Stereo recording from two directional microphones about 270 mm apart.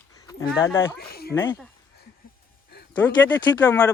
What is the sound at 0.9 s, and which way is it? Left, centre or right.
Speech, left.